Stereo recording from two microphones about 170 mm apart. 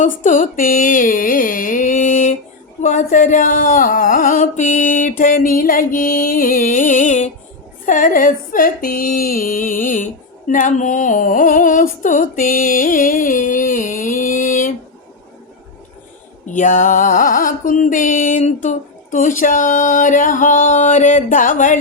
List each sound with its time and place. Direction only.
0.0 s speech: 50° left (ahead or behind)
16.5 s speech: 45° left (ahead or behind)